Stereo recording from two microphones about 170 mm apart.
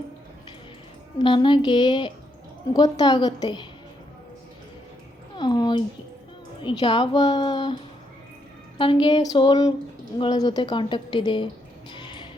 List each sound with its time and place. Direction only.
1.2 s a woman's voice: 30° left (ahead or behind)
5.4 s a sound: 25° left (ahead or behind)
6.6 s a woman's voice: 30° left (ahead or behind)
8.8 s a woman's voice: 30° left (ahead or behind)
11.9 s music: 30° left (ahead or behind)